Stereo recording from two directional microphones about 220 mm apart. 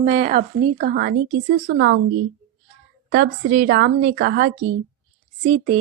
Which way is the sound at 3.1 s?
40° right (ahead or behind).